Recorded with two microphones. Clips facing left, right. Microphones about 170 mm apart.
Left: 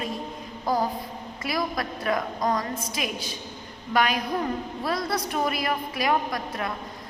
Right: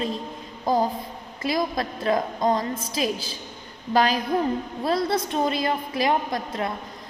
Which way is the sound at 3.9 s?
30° right (ahead or behind).